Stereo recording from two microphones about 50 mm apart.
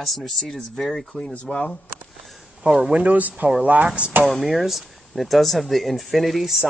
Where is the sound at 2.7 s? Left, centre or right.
Centre.